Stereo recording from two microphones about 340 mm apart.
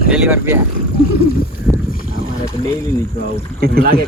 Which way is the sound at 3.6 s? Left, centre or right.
Right.